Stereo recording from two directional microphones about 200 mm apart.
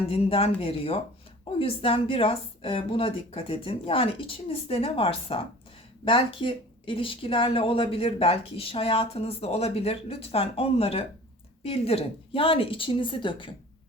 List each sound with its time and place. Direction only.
0.1 s speech: 30° left (ahead or behind)